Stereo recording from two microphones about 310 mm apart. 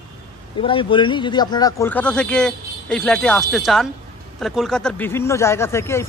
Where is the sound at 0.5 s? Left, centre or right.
Centre.